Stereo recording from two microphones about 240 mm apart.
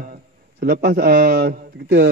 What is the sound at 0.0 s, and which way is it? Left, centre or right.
A man's voice, right.